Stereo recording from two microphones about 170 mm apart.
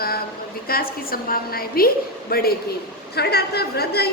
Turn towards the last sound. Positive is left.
turn(degrees=70)  # may be behind; listen again after turning